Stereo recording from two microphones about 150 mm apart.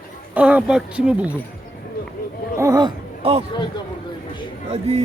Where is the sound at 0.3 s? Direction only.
10° right (ahead or behind).